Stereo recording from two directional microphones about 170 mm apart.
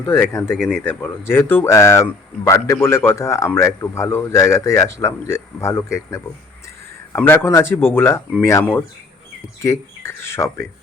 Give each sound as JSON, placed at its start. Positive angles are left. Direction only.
{"t": 0.0, "sound": "speech", "side_deg": 15}